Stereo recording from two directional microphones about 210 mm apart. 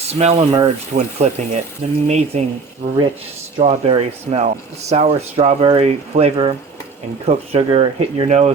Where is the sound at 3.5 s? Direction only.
30° right (ahead or behind).